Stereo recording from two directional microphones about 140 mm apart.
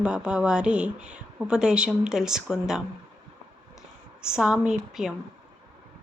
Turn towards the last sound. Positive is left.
turn(degrees=-5)  # may be behind; listen again after turning